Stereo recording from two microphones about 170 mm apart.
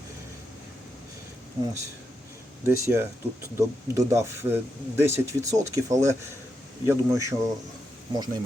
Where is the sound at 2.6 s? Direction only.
15° right (ahead or behind).